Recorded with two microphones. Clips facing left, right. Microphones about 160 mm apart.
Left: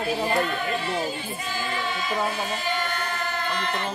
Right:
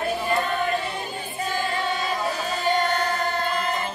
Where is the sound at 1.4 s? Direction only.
40° right (ahead or behind).